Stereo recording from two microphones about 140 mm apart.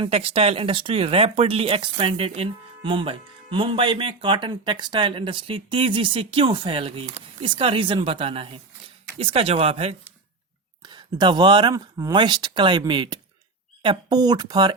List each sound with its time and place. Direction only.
0.0 s speech: 40° right (ahead or behind)
10.8 s speech: 30° right (ahead or behind)